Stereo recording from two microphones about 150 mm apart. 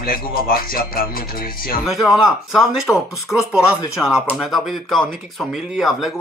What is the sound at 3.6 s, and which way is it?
Speech, 20° left (ahead or behind).